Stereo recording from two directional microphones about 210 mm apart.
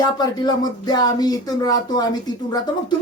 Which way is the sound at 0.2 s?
20° left (ahead or behind).